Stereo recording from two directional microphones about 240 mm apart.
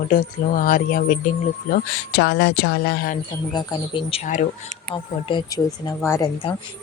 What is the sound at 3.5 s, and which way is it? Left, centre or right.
Speech, centre.